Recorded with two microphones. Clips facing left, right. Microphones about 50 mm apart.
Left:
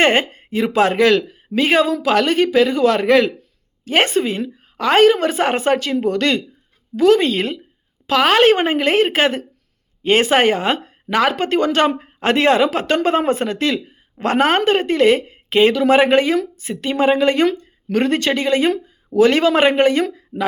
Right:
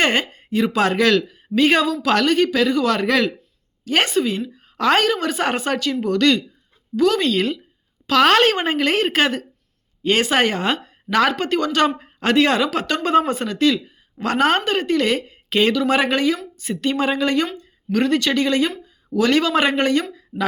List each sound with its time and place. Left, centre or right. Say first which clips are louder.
0.0 s a woman's voice: left 4 dB; left
8.0 s a woman's voice: left 2 dB; centre